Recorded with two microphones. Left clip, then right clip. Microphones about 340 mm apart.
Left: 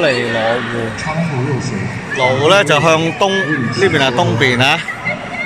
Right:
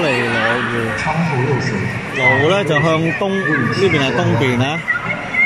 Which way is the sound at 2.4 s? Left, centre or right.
Left.